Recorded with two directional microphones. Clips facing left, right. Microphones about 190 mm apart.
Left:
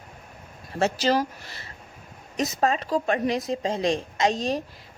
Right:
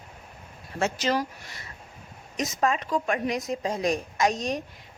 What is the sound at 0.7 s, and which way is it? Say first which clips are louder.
Speech: left 3 dB; 35° left (ahead or behind).